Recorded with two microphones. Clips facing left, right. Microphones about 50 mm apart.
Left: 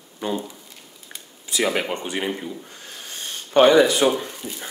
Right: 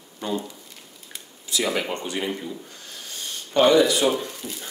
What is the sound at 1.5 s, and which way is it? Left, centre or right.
Speech, left.